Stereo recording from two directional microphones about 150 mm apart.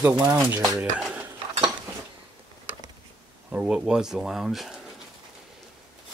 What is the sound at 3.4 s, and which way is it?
Speech, 10° right (ahead or behind).